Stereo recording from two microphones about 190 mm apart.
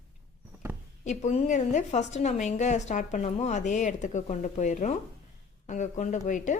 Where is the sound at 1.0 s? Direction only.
35° left (ahead or behind).